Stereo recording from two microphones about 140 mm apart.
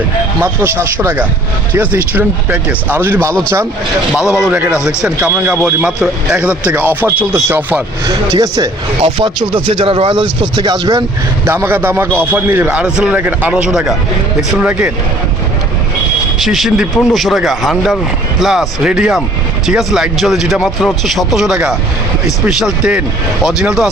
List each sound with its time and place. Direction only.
0.4 s speech: 15° right (ahead or behind)
4.1 s speech: 5° right (ahead or behind); by 8.7 s 25° right (ahead or behind)
9.0 s speech: 40° right (ahead or behind)
11.4 s speech: 15° right (ahead or behind)
16.4 s speech: centre (ahead or behind)